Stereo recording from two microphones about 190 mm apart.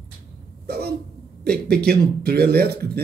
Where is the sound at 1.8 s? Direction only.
55° right (ahead or behind).